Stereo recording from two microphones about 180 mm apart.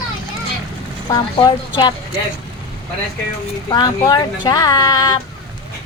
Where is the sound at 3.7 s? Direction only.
20° left (ahead or behind).